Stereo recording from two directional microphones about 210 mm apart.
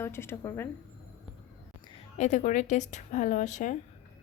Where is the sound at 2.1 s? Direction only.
35° left (ahead or behind).